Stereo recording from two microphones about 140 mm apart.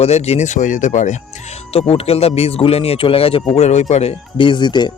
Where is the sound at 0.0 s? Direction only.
50° left (ahead or behind).